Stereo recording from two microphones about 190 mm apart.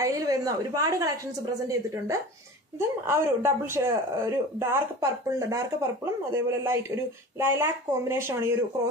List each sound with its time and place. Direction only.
0.0 s speech: 15° right (ahead or behind)
2.8 s speech: 15° right (ahead or behind)